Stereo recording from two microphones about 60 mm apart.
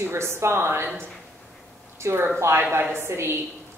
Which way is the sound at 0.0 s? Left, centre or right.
Right.